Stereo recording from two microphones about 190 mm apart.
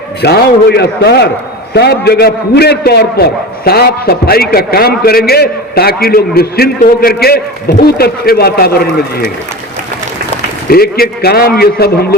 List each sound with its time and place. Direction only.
0.2 s a man's voice: 60° left (ahead or behind)
10.7 s a man's voice: 55° left (ahead or behind)